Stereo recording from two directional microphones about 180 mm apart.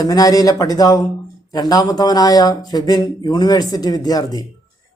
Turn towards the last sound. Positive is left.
turn(degrees=20)  # may be behind; listen again after turning